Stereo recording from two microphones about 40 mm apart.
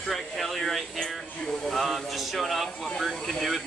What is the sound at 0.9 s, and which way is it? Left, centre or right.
Speech, centre.